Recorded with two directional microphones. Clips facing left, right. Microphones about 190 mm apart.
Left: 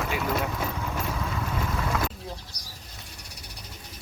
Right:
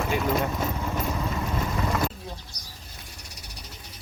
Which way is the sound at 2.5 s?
35° left (ahead or behind).